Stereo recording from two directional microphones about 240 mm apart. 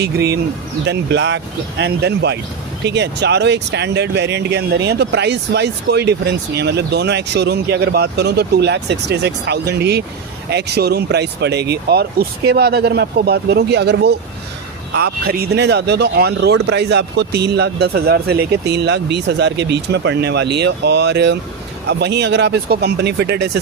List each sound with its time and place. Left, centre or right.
0.9 s speech: right